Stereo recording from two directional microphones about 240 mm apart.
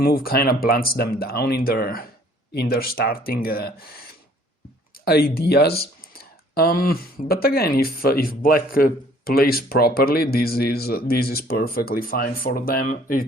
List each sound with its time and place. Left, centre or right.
0.0 s speech: left
5.0 s speech: left